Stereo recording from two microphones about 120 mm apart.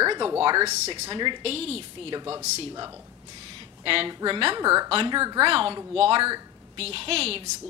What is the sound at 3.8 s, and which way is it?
A woman's voice, 45° right (ahead or behind).